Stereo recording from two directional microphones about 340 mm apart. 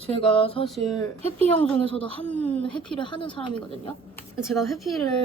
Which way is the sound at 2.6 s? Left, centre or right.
Centre.